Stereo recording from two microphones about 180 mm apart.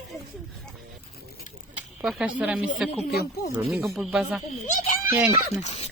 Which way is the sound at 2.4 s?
5° right (ahead or behind).